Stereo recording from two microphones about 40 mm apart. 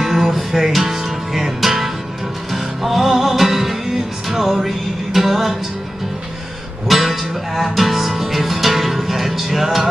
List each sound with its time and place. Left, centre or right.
0.0 s music: centre
6.9 s music: centre